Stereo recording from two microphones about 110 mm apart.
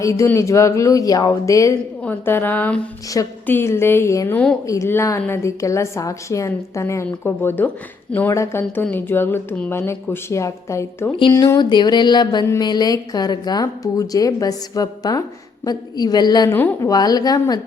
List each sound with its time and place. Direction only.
0.0 s a woman's voice: 30° left (ahead or behind)
2.0 s a woman's voice: 20° left (ahead or behind)
11.2 s a woman's voice: 40° left (ahead or behind)